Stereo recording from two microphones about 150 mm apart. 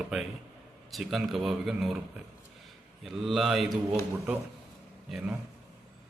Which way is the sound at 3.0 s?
Centre (ahead or behind).